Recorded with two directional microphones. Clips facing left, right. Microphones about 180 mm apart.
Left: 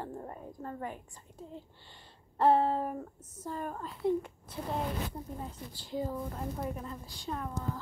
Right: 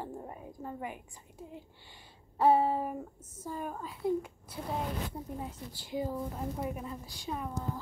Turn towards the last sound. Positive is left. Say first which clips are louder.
# even
turn(degrees=-10)  # may be behind; listen again after turning